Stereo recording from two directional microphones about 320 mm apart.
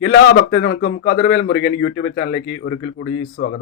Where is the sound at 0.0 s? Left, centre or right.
Left.